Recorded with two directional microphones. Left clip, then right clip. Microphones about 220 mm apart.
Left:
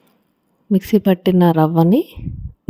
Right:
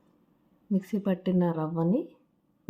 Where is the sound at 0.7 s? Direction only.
45° left (ahead or behind).